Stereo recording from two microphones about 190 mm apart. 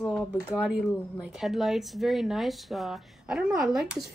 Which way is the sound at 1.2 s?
Centre (ahead or behind).